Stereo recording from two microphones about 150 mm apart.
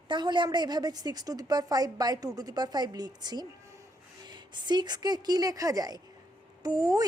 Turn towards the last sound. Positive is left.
turn(degrees=-25)  # may be behind; listen again after turning